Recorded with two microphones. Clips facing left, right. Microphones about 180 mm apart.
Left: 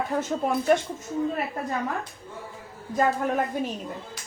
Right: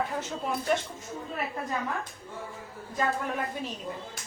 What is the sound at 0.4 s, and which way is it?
Speech, 50° left (ahead or behind).